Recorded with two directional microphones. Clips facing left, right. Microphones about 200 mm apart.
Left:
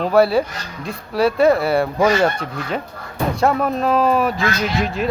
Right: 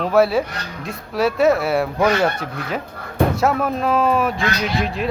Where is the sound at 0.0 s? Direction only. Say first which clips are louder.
Left 1 dB; centre (ahead or behind).